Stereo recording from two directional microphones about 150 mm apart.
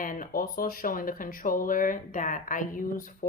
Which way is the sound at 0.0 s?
65° left (ahead or behind).